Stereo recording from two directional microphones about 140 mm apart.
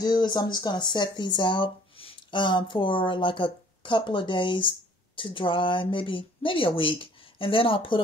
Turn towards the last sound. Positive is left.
turn(degrees=40)  # may be behind; listen again after turning